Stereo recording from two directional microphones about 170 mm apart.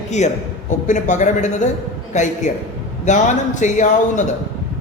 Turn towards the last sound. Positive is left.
turn(degrees=45)  # may be behind; listen again after turning